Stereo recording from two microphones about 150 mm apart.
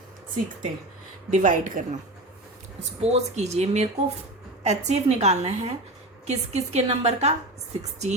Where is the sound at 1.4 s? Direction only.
60° right (ahead or behind).